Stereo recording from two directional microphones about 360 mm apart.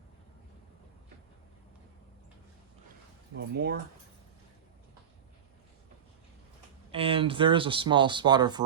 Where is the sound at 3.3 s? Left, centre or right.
Right.